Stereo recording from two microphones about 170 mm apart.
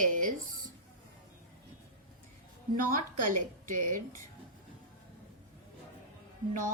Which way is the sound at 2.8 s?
55° right (ahead or behind).